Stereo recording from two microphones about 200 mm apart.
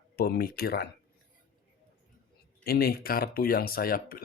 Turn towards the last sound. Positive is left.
turn(degrees=45)  # may be behind; listen again after turning